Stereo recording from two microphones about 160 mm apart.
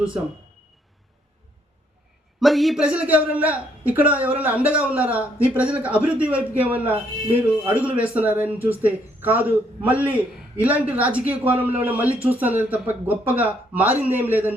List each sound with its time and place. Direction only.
2.4 s speech: centre (ahead or behind)
6.9 s speech: 35° right (ahead or behind)
7.7 s speech: 10° right (ahead or behind)